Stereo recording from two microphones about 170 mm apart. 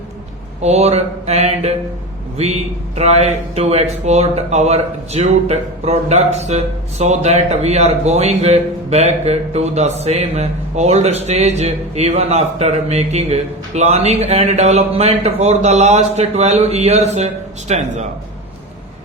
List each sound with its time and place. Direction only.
0.6 s speech: 40° right (ahead or behind)